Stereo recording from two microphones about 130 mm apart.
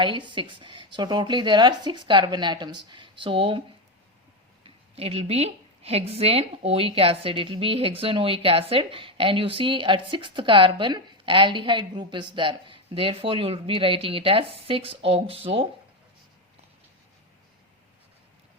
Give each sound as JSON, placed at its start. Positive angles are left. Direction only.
{"t": 0.0, "sound": "speech", "side_deg": -40}
{"t": 4.6, "sound": "a woman's voice", "side_deg": -50}